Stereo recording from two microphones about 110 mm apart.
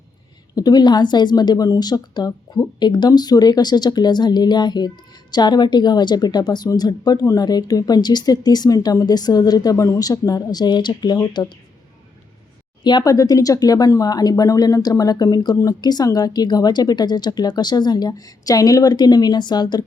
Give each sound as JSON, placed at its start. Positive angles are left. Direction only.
{"t": 0.5, "sound": "speech", "side_deg": 40}
{"t": 12.8, "sound": "speech", "side_deg": 40}